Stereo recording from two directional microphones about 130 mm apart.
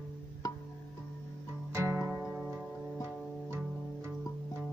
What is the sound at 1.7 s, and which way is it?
Music, 20° right (ahead or behind).